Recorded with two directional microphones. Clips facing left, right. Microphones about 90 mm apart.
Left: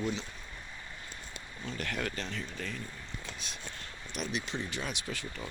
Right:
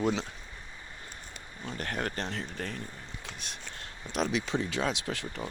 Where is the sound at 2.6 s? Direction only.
55° right (ahead or behind).